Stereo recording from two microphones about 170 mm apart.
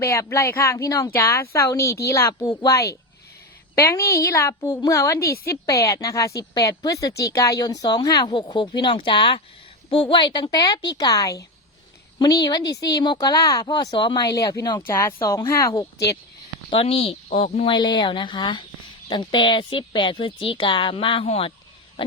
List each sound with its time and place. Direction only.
0.0 s speech: 15° left (ahead or behind)
12.5 s speech: 25° left (ahead or behind)
16.6 s speech: 35° left (ahead or behind)
17.7 s speech: 25° left (ahead or behind)